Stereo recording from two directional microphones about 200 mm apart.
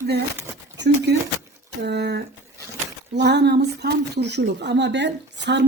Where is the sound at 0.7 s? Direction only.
60° right (ahead or behind).